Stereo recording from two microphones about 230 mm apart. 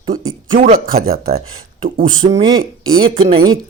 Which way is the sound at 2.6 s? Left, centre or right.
Right.